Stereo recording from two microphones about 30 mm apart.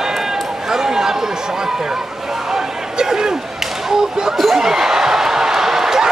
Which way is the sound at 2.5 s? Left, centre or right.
Right.